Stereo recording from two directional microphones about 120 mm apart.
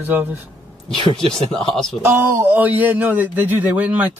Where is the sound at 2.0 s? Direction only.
20° right (ahead or behind).